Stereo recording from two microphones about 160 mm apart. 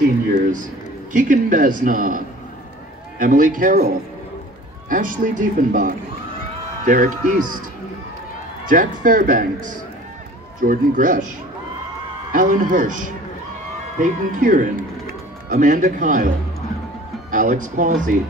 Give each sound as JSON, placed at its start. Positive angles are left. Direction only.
{"t": 1.1, "sound": "a man's voice", "side_deg": -55}
{"t": 4.8, "sound": "a man's voice", "side_deg": -55}
{"t": 8.6, "sound": "a man's voice", "side_deg": -55}
{"t": 12.3, "sound": "a man's voice", "side_deg": -55}
{"t": 17.3, "sound": "a man's voice", "side_deg": -55}